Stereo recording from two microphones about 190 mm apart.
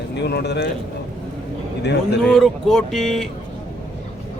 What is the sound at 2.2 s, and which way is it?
A man's voice, centre (ahead or behind).